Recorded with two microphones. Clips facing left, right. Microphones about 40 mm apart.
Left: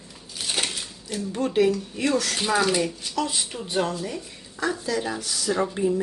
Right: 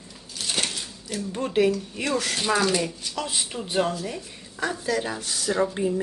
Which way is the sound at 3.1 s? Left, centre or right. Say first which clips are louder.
Left 4 dB; centre.